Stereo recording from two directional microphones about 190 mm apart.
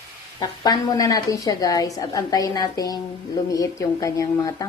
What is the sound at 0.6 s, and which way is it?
A woman's voice, 20° left (ahead or behind).